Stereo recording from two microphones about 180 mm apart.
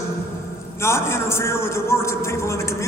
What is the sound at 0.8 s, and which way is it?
A man's voice, 15° left (ahead or behind).